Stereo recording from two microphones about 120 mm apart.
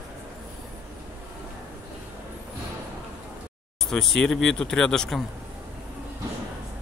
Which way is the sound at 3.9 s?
5° left (ahead or behind).